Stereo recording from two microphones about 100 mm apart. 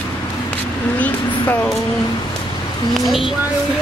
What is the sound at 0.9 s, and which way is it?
Vehicle, 15° left (ahead or behind).